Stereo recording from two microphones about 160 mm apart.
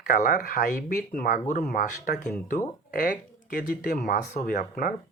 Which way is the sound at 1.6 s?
70° left (ahead or behind).